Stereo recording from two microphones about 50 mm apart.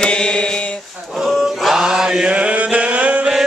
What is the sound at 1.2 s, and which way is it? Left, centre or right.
Chant, centre.